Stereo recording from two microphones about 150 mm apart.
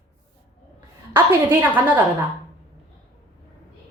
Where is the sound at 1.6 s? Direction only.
10° right (ahead or behind).